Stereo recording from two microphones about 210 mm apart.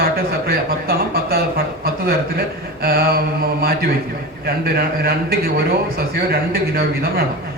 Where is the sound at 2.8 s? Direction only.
50° right (ahead or behind).